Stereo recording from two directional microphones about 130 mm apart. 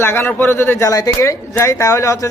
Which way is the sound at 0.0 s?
15° left (ahead or behind).